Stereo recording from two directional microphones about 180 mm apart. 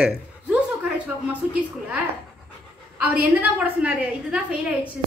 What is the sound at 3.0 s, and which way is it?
A man's voice, 10° right (ahead or behind).